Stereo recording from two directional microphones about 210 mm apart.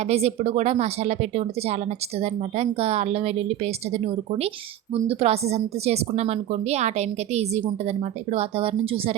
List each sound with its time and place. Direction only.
0.1 s a woman's voice: 30° right (ahead or behind)